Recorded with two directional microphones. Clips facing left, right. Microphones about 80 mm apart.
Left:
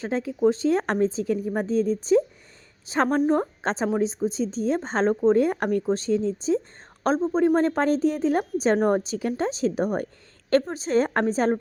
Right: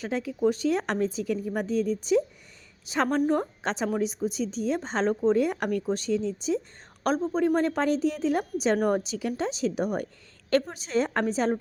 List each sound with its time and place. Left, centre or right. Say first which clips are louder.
0.0 s a woman's voice: left 4 dB; left
3.2 s a woman's voice: left 2 dB; left
3.6 s a woman's voice: left 3 dB; left